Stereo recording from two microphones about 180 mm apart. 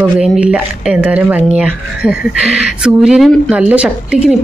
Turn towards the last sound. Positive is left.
turn(degrees=-5)  # may be behind; listen again after turning